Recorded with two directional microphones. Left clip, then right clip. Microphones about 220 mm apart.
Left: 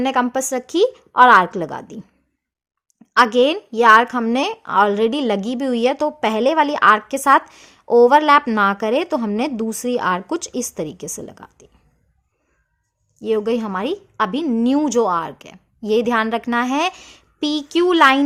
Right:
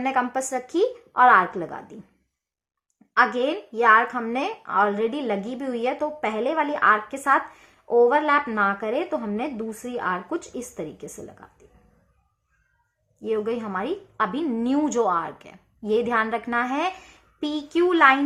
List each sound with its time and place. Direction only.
0.0 s a woman's voice: 40° left (ahead or behind)
3.3 s a woman's voice: 45° left (ahead or behind)
13.1 s a woman's voice: 45° left (ahead or behind)